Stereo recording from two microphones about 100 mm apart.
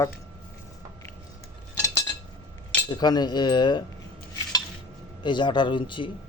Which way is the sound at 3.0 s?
45° left (ahead or behind).